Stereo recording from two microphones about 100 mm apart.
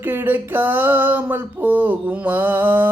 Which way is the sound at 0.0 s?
20° right (ahead or behind).